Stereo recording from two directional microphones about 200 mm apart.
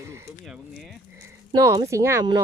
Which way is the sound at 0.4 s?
Centre (ahead or behind).